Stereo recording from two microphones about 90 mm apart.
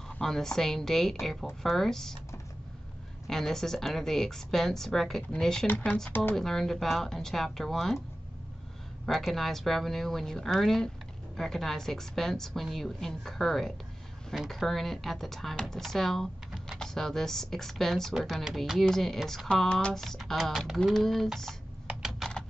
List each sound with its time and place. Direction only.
0.2 s speech: 5° left (ahead or behind)
3.3 s speech: 5° left (ahead or behind)
5.7 s speech: 20° left (ahead or behind)
6.3 s speech: 5° left (ahead or behind)
9.0 s speech: centre (ahead or behind)
21.8 s computer keyboard: 5° right (ahead or behind)